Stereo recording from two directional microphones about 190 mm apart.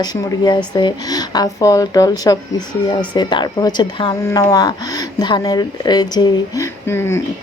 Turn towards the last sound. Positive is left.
turn(degrees=10)  # may be behind; listen again after turning